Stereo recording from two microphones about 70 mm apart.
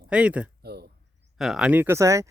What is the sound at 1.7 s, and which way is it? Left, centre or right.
Speech, right.